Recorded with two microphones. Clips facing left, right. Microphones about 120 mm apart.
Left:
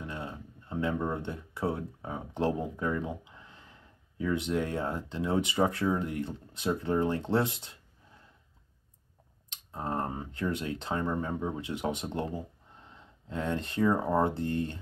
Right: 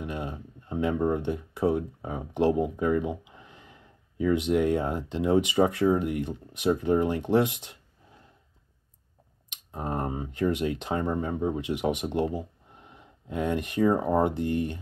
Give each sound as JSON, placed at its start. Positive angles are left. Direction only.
{"t": 0.0, "sound": "a sound", "side_deg": -20}
{"t": 1.0, "sound": "speech", "side_deg": -20}
{"t": 9.5, "sound": "speech", "side_deg": -20}